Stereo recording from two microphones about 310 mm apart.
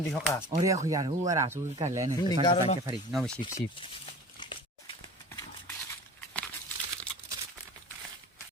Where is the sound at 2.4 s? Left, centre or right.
Centre.